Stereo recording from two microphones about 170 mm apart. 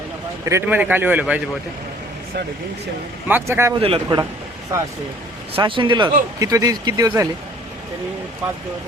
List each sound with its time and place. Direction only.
0.4 s a man's voice: 15° right (ahead or behind)
3.2 s a man's voice: 10° right (ahead or behind)
3.8 s a man's voice: 30° right (ahead or behind)
5.5 s speech: 30° right (ahead or behind)